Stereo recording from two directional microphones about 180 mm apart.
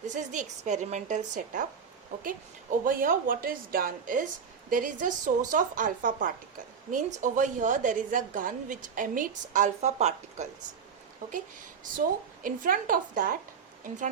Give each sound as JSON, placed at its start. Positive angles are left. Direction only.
{"t": 0.0, "sound": "a woman's voice", "side_deg": -45}
{"t": 2.8, "sound": "a woman's voice", "side_deg": -50}